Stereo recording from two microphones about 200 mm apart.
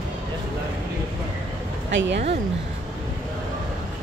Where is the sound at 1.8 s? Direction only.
65° right (ahead or behind).